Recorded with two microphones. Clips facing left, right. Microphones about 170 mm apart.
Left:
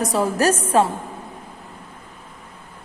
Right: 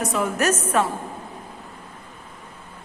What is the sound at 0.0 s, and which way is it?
Speech, 35° left (ahead or behind).